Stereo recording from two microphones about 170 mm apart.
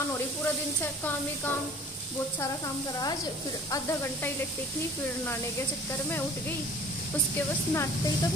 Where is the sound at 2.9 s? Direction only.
20° left (ahead or behind).